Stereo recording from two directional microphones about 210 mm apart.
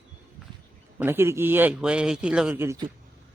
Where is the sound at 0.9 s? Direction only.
10° right (ahead or behind).